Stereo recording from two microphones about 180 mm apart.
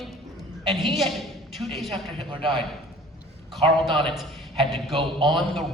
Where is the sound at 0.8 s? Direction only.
Centre (ahead or behind).